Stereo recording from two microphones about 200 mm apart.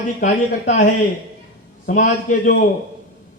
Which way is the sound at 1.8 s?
40° left (ahead or behind).